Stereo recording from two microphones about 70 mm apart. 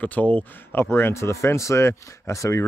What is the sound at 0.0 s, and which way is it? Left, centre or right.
Speech, left.